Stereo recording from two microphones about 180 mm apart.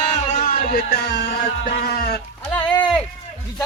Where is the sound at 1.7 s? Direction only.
65° left (ahead or behind).